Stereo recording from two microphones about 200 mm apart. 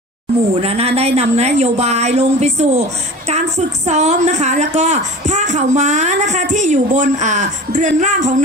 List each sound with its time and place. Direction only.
0.5 s a woman's voice: 30° right (ahead or behind)
3.8 s a woman's voice: 35° right (ahead or behind)